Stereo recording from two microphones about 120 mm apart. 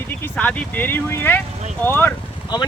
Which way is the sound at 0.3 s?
10° left (ahead or behind).